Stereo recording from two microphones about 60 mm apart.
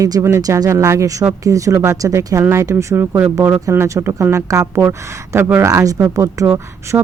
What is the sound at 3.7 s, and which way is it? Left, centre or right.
Speech, right.